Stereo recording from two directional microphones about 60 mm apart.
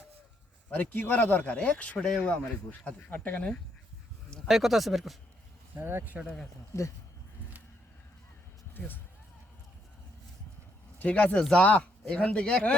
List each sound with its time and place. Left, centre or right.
0.7 s a man's voice: left
2.6 s speech: left
4.4 s speech: centre
5.8 s speech: right
11.0 s speech: left